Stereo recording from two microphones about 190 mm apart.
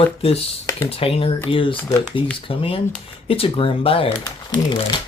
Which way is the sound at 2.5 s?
30° left (ahead or behind).